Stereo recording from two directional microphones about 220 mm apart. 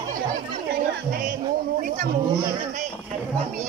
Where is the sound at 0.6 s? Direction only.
45° right (ahead or behind).